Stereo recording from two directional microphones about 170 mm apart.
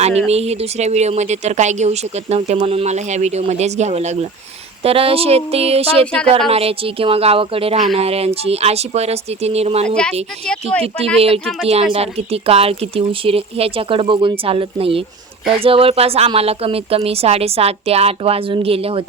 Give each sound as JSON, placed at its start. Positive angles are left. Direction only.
{"t": 0.3, "sound": "speech", "side_deg": -40}
{"t": 9.8, "sound": "speech", "side_deg": 5}
{"t": 11.6, "sound": "speech", "side_deg": -35}